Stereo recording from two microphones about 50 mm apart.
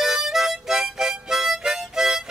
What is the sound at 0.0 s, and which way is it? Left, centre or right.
Harmonica, centre.